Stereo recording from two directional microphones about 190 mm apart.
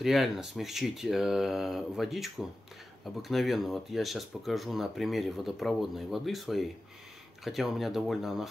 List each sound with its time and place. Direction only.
0.0 s speech: centre (ahead or behind)